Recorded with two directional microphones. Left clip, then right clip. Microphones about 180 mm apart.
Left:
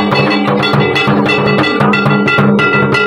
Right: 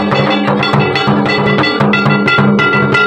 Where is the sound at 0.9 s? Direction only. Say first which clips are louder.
Left 1 dB; 10° left (ahead or behind).